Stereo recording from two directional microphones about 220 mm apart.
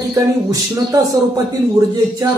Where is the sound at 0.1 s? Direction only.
15° right (ahead or behind).